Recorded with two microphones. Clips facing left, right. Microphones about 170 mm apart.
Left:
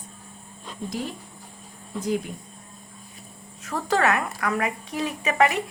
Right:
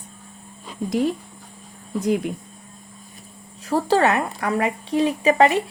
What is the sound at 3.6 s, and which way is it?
Speech, 35° right (ahead or behind).